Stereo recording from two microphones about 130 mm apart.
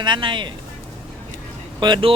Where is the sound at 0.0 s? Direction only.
35° right (ahead or behind).